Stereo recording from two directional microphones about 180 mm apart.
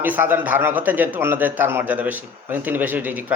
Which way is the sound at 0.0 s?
10° right (ahead or behind).